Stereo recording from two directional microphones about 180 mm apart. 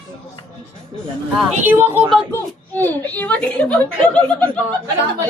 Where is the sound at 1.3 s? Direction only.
10° right (ahead or behind).